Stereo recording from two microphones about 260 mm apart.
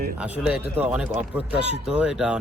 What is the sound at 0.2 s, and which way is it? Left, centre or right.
Speech, centre.